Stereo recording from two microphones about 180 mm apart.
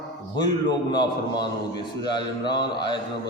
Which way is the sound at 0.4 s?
25° left (ahead or behind).